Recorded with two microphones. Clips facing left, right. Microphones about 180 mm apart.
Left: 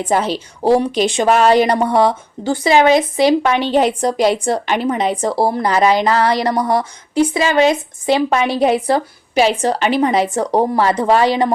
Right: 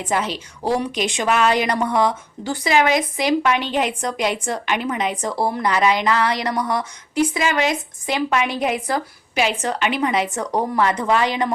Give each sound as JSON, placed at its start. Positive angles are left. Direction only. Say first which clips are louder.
{"t": 0.0, "sound": "speech", "louder": "left 6 dB", "side_deg": 30}